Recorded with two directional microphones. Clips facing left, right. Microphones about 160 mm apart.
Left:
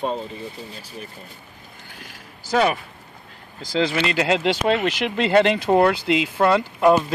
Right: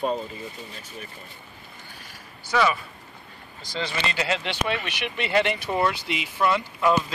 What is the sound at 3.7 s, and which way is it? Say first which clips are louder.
Speech: left 8 dB; 90° left.